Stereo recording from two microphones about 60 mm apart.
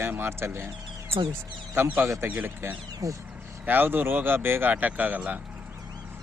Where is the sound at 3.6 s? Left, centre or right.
Right.